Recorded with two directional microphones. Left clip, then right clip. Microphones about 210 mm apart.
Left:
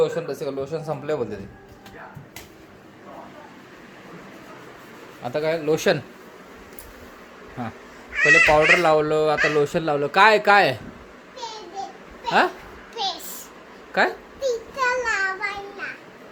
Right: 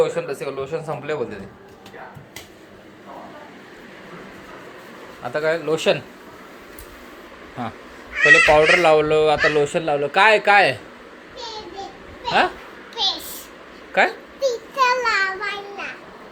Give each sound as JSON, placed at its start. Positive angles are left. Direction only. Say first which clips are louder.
{"t": 0.0, "sound": "speech", "louder": "right 2 dB", "side_deg": 35}
{"t": 5.2, "sound": "speech", "louder": "right 2 dB", "side_deg": 35}
{"t": 7.6, "sound": "speech", "louder": "right 4 dB", "side_deg": 15}
{"t": 12.9, "sound": "a sound", "louder": "right 5 dB", "side_deg": 10}
{"t": 14.8, "sound": "child singing", "louder": "right 5 dB", "side_deg": 0}